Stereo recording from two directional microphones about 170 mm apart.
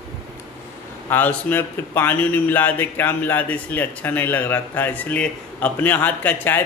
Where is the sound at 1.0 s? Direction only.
10° left (ahead or behind).